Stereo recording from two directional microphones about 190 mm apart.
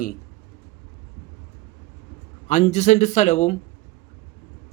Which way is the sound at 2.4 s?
40° left (ahead or behind).